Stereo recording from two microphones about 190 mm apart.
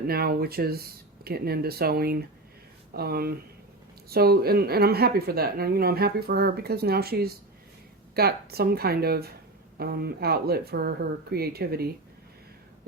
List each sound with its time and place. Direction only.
0.1 s a woman's voice: 55° right (ahead or behind)